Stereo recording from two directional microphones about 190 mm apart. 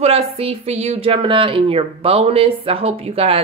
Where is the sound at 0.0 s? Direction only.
30° right (ahead or behind).